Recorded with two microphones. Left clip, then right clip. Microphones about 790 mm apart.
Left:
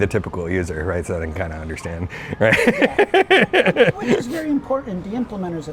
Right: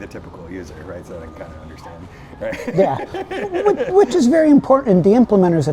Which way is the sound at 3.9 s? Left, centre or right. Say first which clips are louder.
Right 9 dB; right.